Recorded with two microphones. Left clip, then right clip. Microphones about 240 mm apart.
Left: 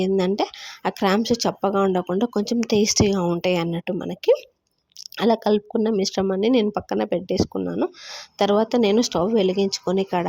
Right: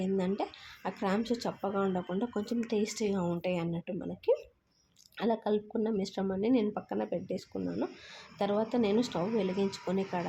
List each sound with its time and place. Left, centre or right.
0.0 s speech: left